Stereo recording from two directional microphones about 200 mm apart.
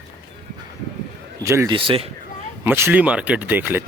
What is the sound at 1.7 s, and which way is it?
Speech, 25° right (ahead or behind).